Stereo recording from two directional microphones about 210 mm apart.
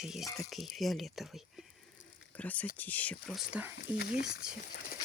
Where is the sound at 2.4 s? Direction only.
5° left (ahead or behind).